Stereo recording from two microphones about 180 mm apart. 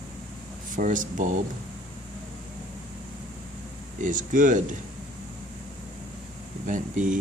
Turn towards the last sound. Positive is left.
turn(degrees=-45)  # may be behind; listen again after turning